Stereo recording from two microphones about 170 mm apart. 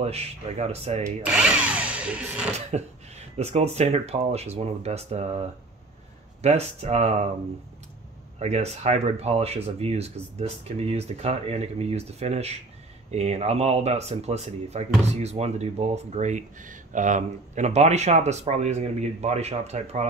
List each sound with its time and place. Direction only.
0.0 s speech: 40° right (ahead or behind)
1.0 s drill: 5° right (ahead or behind)
2.7 s speech: 40° right (ahead or behind)
6.4 s speech: 40° right (ahead or behind)
8.4 s speech: 40° right (ahead or behind)